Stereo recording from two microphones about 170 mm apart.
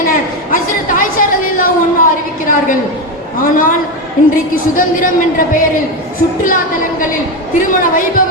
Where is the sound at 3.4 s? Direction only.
55° left (ahead or behind).